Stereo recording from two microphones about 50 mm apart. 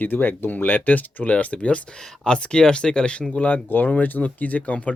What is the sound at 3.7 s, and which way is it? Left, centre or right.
Speech, left.